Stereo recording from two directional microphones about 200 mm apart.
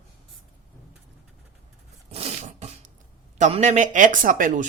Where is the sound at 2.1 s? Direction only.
30° right (ahead or behind).